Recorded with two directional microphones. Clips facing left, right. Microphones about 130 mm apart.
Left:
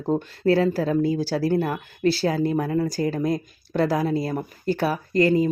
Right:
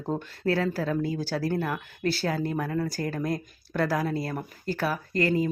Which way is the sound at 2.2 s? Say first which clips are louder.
Left 6 dB; 25° left (ahead or behind).